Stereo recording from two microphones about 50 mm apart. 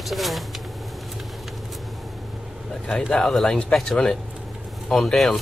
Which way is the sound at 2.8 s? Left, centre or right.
Centre.